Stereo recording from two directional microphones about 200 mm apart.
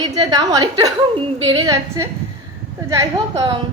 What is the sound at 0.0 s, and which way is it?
A woman's voice, 20° right (ahead or behind).